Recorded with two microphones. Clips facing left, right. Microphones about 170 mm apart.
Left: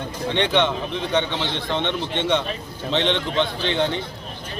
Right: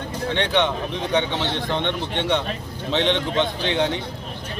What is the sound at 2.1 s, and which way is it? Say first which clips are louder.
A man's voice: left 1 dB; 10° right (ahead or behind).